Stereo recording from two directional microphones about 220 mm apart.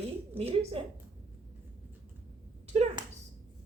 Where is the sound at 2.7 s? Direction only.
30° right (ahead or behind).